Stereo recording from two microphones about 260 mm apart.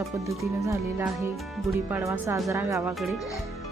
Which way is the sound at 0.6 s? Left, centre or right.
Centre.